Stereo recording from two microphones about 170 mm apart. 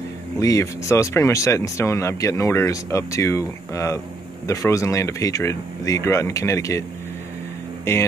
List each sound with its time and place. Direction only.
0.4 s speech: 20° left (ahead or behind)
7.9 s speech: 15° left (ahead or behind)